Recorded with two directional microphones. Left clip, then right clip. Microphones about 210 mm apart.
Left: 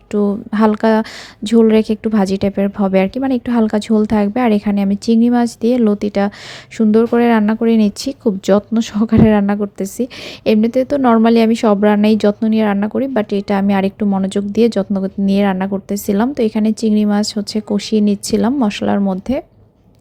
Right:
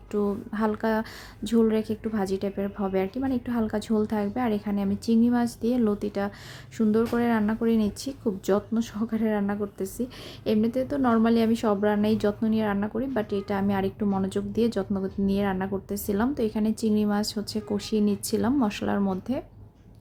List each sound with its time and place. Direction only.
0.1 s speech: 30° left (ahead or behind)